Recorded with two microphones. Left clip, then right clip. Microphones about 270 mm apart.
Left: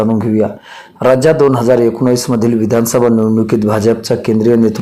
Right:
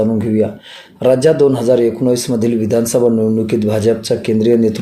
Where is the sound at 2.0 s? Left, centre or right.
Left.